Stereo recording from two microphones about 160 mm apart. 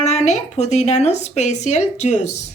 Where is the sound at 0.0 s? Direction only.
45° left (ahead or behind).